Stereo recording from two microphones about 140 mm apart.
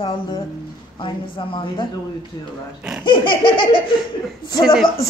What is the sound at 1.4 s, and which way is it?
Speech, 35° left (ahead or behind).